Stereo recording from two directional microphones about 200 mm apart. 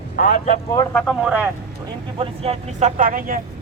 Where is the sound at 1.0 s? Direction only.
Centre (ahead or behind).